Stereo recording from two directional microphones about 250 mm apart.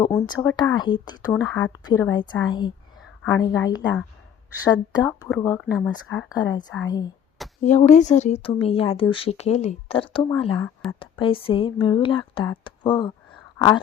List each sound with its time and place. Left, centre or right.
0.0 s speech: centre
7.6 s speech: left; by 13.7 s centre